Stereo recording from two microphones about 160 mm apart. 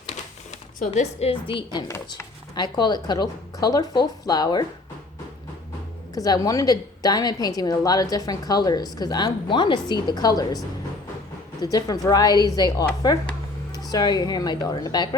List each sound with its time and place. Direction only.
0.9 s a woman's voice: 40° left (ahead or behind)
1.9 s a woman's voice: 20° left (ahead or behind)
6.1 s a woman's voice: 20° left (ahead or behind)
11.6 s a woman's voice: 25° left (ahead or behind)